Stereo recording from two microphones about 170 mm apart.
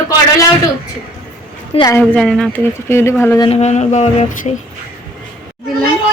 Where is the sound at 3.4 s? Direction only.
40° left (ahead or behind).